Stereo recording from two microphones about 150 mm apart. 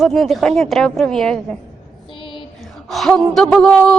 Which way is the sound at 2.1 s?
35° left (ahead or behind).